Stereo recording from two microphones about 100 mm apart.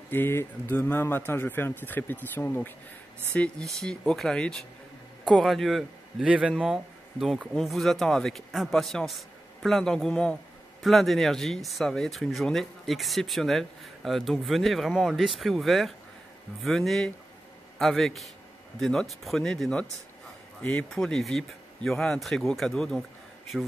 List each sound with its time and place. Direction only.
0.1 s speech: 20° left (ahead or behind); by 6.2 s centre (ahead or behind)
6.2 s a man's voice: 10° right (ahead or behind)